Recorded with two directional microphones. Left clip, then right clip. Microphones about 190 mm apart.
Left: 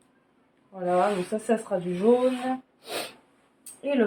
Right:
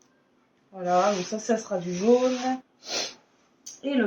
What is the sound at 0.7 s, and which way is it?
Speech, 20° left (ahead or behind).